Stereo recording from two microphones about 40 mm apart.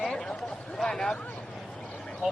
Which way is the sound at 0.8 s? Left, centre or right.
Centre.